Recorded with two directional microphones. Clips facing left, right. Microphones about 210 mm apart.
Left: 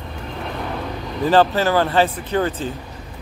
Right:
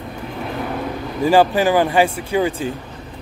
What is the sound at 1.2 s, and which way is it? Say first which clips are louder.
Speech: right 2 dB; 10° right (ahead or behind).